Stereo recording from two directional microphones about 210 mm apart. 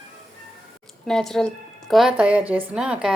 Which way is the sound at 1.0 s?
Centre (ahead or behind).